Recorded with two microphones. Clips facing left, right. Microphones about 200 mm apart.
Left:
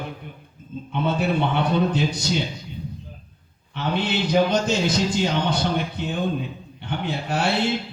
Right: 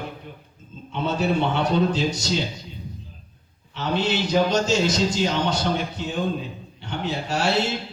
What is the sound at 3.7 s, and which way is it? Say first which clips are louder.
A man's voice: right 1 dB; 55° left (ahead or behind).